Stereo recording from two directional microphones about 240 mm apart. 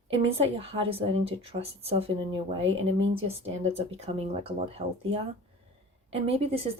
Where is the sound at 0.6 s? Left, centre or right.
Right.